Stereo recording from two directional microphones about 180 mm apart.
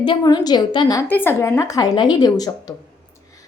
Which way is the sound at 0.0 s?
25° left (ahead or behind).